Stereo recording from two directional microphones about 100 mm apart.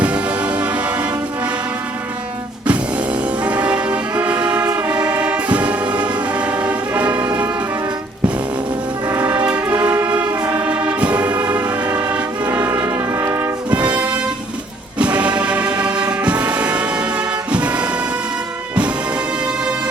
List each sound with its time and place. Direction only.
0.0 s music: 15° right (ahead or behind)
2.6 s music: 10° right (ahead or behind)
9.0 s music: 20° right (ahead or behind)
9.7 s music: 35° right (ahead or behind)
10.2 s music: 15° right (ahead or behind)
13.9 s vehicle: 15° right (ahead or behind)
14.9 s music: 15° right (ahead or behind)